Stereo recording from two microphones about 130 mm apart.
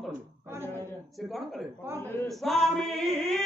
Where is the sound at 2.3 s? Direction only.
Centre (ahead or behind).